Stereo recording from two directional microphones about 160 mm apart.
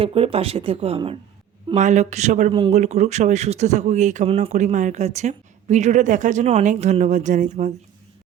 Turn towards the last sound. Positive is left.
turn(degrees=-50)  # may be behind; listen again after turning